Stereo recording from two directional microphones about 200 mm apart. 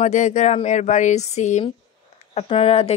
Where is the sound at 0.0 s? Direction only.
35° left (ahead or behind).